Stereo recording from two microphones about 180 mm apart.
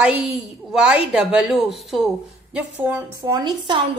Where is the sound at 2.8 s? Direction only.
15° right (ahead or behind).